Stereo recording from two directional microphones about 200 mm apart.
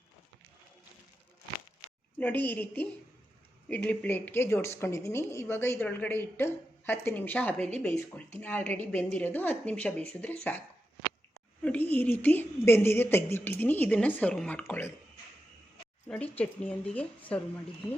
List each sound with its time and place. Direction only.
2.1 s a woman's voice: 10° left (ahead or behind)
11.6 s a woman's voice: 10° left (ahead or behind)
16.0 s a woman's voice: 5° left (ahead or behind)